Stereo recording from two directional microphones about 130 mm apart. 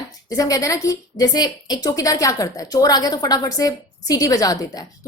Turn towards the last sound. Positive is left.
turn(degrees=30)  # may be behind; listen again after turning